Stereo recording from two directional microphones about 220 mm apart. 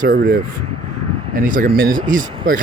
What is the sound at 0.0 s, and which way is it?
Speech, 45° right (ahead or behind).